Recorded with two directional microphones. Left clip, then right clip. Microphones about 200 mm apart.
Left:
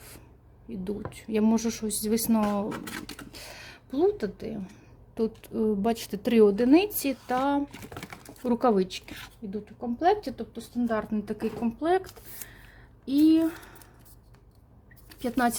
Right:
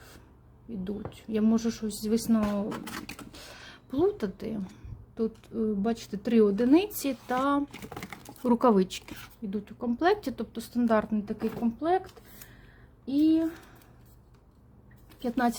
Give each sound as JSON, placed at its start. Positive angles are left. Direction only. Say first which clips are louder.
{"t": 1.1, "sound": "speech", "louder": "left 2 dB", "side_deg": 15}
{"t": 2.4, "sound": "speech", "louder": "left 3 dB", "side_deg": 0}
{"t": 3.4, "sound": "a sound", "louder": "left 3 dB", "side_deg": 10}
{"t": 4.6, "sound": "a sound", "louder": "right 1 dB", "side_deg": 10}
{"t": 5.4, "sound": "speech", "louder": "left 3 dB", "side_deg": 15}
{"t": 8.1, "sound": "speech", "louder": "right 2 dB", "side_deg": -10}
{"t": 9.5, "sound": "a woman's voice", "louder": "right 1 dB", "side_deg": -15}
{"t": 10.5, "sound": "speech", "louder": "right 4 dB", "side_deg": -25}
{"t": 11.3, "sound": "speech", "louder": "left 1 dB", "side_deg": 5}
{"t": 13.1, "sound": "speech", "louder": "left 3 dB", "side_deg": 10}
{"t": 15.2, "sound": "speech", "louder": "left 2 dB", "side_deg": 5}